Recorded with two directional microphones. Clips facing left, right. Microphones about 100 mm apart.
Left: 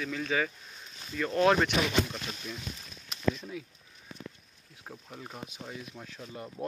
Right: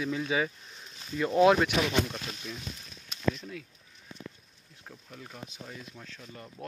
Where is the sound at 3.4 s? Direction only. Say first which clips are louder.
Left 2 dB; 10° left (ahead or behind).